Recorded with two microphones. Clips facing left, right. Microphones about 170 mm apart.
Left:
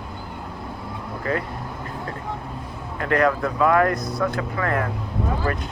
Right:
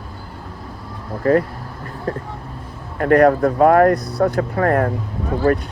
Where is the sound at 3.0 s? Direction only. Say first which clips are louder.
Right 8 dB; 50° right (ahead or behind).